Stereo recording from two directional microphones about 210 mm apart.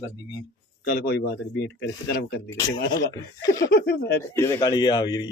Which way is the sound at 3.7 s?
45° left (ahead or behind).